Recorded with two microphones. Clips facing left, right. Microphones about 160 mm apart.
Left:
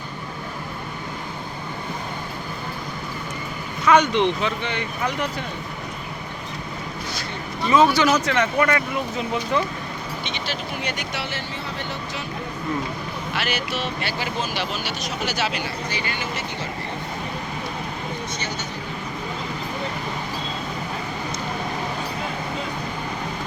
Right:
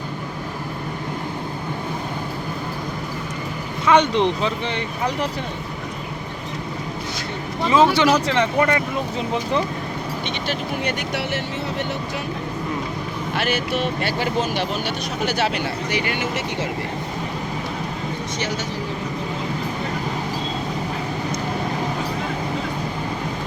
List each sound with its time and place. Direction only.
3.8 s speech: 25° right (ahead or behind)
7.7 s speech: 30° right (ahead or behind)
10.2 s speech: 55° right (ahead or behind)
13.3 s speech: 50° right (ahead or behind); by 16.0 s 65° right (ahead or behind)